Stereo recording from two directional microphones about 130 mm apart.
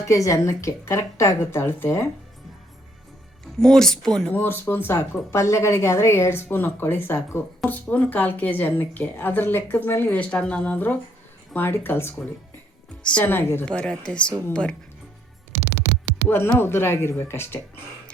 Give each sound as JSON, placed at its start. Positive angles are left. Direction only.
{"t": 0.1, "sound": "a woman's voice", "side_deg": 25}
{"t": 3.6, "sound": "speech", "side_deg": 5}
{"t": 4.4, "sound": "a woman's voice", "side_deg": 15}
{"t": 13.7, "sound": "a woman's voice", "side_deg": 5}
{"t": 16.3, "sound": "a woman's voice", "side_deg": 20}